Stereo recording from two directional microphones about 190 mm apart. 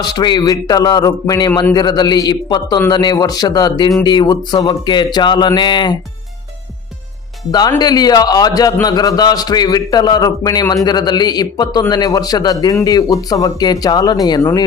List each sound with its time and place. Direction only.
0.0 s a man's voice: 20° left (ahead or behind)
7.5 s a man's voice: 20° left (ahead or behind)